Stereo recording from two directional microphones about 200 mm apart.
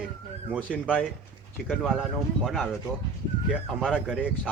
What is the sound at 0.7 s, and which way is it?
Speech, 10° left (ahead or behind).